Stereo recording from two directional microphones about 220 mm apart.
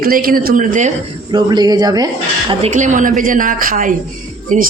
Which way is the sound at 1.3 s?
20° right (ahead or behind).